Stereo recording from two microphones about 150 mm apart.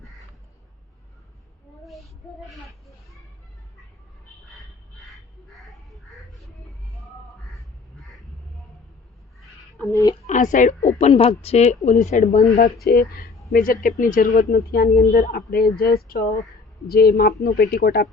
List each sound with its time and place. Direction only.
1.8 s child singing: centre (ahead or behind)
4.4 s a sound: centre (ahead or behind)
9.4 s a sound: 5° left (ahead or behind)
9.9 s speech: 25° left (ahead or behind)
10.2 s a woman's voice: 55° left (ahead or behind)
12.8 s a woman's voice: 90° left
13.5 s speech: 65° left (ahead or behind); by 16.0 s 85° left
16.0 s speech: 75° left (ahead or behind)
16.8 s a woman's voice: 90° left